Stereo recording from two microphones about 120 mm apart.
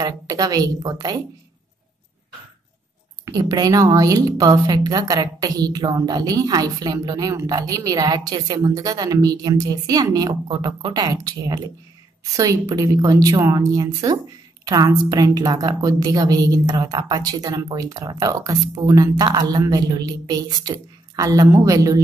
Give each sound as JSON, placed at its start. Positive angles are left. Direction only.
{"t": 0.0, "sound": "speech", "side_deg": -30}
{"t": 3.3, "sound": "speech", "side_deg": -30}
{"t": 12.4, "sound": "a woman's voice", "side_deg": -30}